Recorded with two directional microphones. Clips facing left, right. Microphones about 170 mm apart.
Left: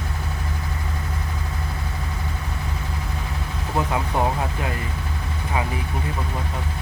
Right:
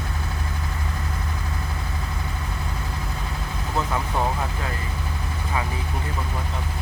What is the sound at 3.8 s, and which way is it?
Speech, 15° left (ahead or behind).